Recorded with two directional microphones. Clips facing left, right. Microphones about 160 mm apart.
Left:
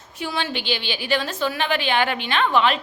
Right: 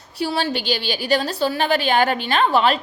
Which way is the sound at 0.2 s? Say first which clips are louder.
Right 5 dB; 35° right (ahead or behind).